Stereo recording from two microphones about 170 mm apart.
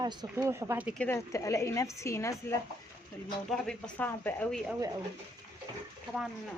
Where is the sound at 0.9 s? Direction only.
15° left (ahead or behind).